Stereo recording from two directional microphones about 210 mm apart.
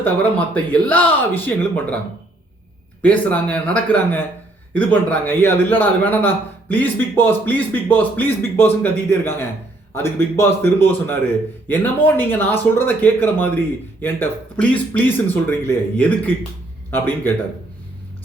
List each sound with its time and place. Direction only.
0.0 s a man's voice: 5° left (ahead or behind)
3.0 s a man's voice: 5° left (ahead or behind)